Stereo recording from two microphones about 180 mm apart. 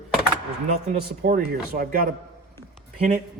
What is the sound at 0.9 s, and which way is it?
Speech, 50° right (ahead or behind).